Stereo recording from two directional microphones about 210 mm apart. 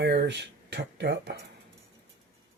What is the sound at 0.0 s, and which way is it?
Speech, 55° right (ahead or behind).